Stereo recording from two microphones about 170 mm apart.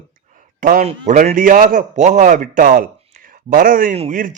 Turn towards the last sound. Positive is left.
turn(degrees=-50)  # may be behind; listen again after turning